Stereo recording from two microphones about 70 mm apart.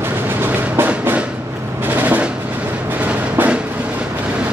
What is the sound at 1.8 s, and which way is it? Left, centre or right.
Drum, right.